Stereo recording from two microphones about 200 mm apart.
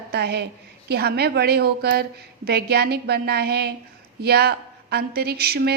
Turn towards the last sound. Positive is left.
turn(degrees=-50)  # may be behind; listen again after turning